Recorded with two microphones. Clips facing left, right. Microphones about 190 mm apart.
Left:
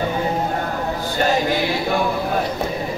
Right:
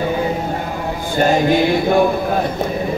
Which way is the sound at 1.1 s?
50° right (ahead or behind).